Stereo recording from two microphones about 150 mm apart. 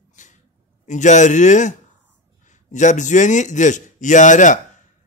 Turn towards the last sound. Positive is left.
turn(degrees=55)  # may be behind; listen again after turning